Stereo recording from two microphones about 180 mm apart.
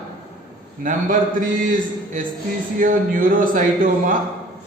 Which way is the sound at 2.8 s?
50° right (ahead or behind).